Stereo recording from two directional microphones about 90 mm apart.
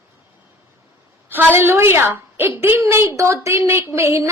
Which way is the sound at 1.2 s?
25° right (ahead or behind).